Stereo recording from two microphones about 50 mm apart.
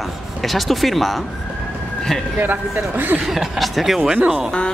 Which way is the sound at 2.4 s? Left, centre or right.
Right.